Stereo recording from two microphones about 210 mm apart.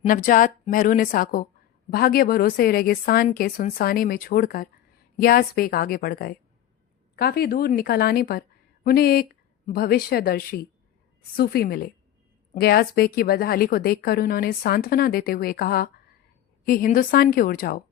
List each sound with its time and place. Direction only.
0.0 s a woman's voice: 40° left (ahead or behind)